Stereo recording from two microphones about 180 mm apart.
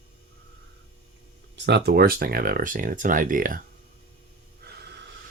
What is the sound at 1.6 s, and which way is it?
Speech, 70° right (ahead or behind).